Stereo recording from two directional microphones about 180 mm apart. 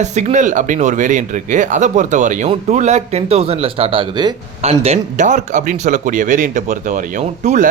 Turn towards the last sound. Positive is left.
turn(degrees=-45)  # may be behind; listen again after turning